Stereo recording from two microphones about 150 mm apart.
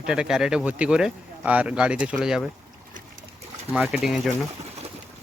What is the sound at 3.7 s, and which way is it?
Speech, 5° right (ahead or behind).